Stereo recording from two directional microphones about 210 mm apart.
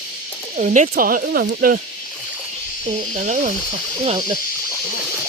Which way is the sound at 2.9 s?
35° right (ahead or behind).